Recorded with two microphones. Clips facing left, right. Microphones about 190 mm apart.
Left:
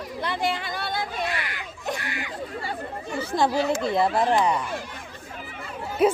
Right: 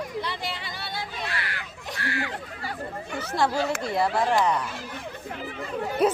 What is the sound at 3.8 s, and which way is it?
Speech, 20° left (ahead or behind).